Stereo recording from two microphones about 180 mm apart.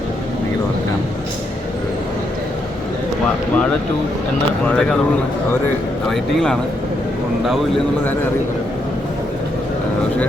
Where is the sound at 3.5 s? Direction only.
5° left (ahead or behind).